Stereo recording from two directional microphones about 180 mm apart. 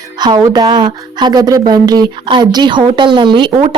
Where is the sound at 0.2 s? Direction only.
25° right (ahead or behind).